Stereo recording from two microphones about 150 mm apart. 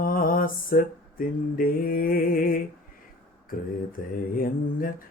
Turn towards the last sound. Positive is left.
turn(degrees=70)  # may be behind; listen again after turning